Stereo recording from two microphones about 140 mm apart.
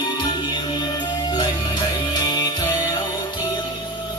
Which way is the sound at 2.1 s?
30° left (ahead or behind).